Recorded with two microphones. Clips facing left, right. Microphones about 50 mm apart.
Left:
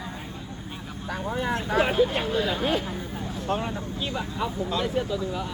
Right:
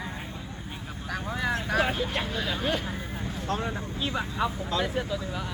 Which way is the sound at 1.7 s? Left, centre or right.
Centre.